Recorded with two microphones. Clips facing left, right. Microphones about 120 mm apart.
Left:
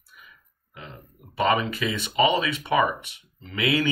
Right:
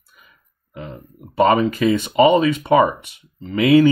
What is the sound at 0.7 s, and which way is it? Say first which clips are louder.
Speech: right 9 dB; 40° right (ahead or behind).